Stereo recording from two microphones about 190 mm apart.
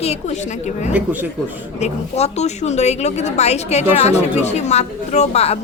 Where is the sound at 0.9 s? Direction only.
10° right (ahead or behind).